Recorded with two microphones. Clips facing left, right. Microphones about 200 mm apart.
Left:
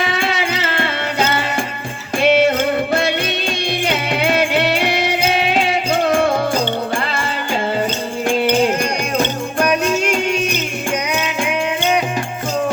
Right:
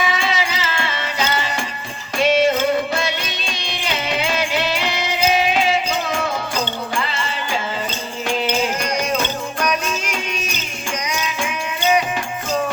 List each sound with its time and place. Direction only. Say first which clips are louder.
0.0 s music: left 2 dB; 60° left (ahead or behind)